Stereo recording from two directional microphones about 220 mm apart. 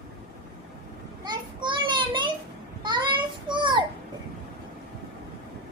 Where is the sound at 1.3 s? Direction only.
20° right (ahead or behind).